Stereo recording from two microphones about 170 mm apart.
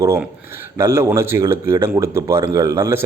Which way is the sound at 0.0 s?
15° right (ahead or behind).